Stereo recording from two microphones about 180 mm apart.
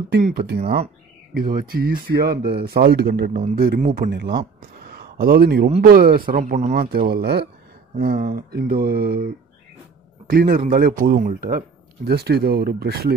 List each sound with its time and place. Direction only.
0.2 s a man's voice: 60° right (ahead or behind)
3.4 s a man's voice: 50° right (ahead or behind)
4.1 s speech: 65° right (ahead or behind)
5.1 s a man's voice: 55° right (ahead or behind)
6.7 s a man's voice: 60° right (ahead or behind)